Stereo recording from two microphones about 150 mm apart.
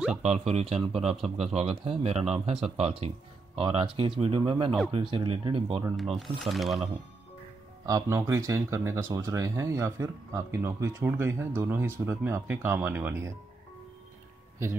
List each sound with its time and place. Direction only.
0.2 s speech: 45° right (ahead or behind)
6.1 s speech: centre (ahead or behind)
7.8 s speech: 25° right (ahead or behind)